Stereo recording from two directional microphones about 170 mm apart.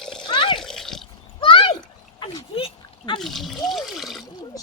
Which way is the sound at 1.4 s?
35° left (ahead or behind).